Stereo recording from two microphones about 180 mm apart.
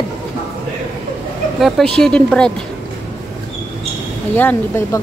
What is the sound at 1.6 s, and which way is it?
Speech, 5° left (ahead or behind).